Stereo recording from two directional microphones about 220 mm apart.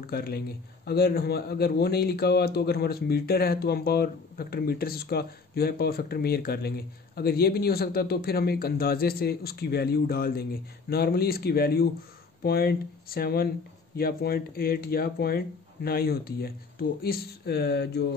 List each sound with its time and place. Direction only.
0.0 s speech: 45° left (ahead or behind)